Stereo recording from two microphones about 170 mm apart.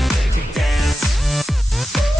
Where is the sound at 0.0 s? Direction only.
Centre (ahead or behind).